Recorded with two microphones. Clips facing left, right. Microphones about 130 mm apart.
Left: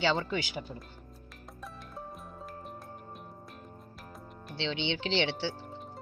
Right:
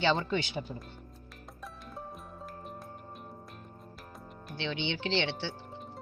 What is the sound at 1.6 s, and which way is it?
Music, centre (ahead or behind).